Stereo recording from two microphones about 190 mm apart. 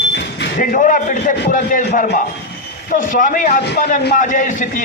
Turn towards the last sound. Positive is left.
turn(degrees=40)  # may be behind; listen again after turning